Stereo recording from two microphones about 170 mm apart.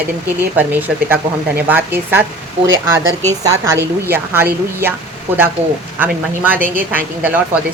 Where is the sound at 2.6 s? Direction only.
90° right.